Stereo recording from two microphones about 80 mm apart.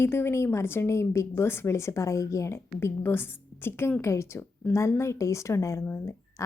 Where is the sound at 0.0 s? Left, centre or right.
Left.